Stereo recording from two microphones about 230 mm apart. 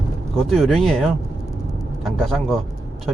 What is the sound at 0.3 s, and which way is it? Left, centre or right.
A man's voice, centre.